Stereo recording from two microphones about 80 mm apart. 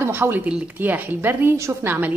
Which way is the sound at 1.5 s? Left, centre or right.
Right.